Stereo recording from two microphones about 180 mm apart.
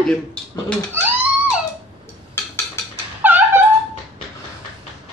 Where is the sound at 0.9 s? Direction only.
10° right (ahead or behind).